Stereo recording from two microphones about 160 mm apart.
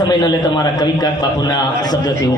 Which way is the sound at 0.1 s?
25° left (ahead or behind).